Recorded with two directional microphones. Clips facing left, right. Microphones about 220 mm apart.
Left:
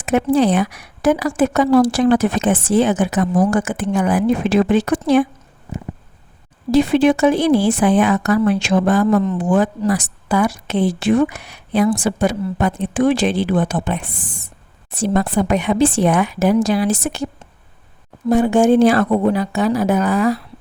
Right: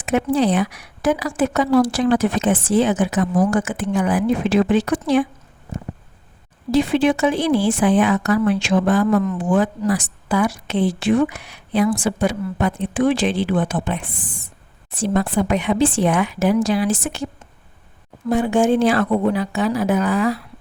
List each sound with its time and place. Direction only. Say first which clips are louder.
0.0 s a woman's voice: left 3 dB; 50° left (ahead or behind)
6.7 s a woman's voice: left 3 dB; 45° left (ahead or behind)
18.3 s speech: left 4 dB; 40° left (ahead or behind)